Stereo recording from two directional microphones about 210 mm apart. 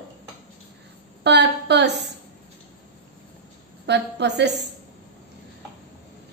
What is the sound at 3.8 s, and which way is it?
Speech, 55° right (ahead or behind).